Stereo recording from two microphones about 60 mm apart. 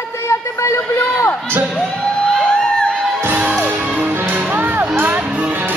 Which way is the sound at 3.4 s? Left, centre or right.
Right.